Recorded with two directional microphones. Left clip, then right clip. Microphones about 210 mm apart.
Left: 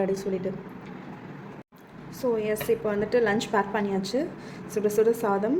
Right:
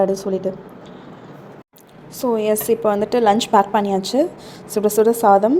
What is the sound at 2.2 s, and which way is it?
A woman's voice, 30° right (ahead or behind).